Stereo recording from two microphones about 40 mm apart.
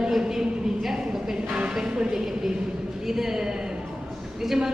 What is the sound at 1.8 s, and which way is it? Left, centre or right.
Speech, right.